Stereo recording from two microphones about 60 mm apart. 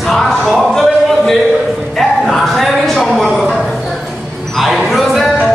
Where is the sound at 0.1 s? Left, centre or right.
Centre.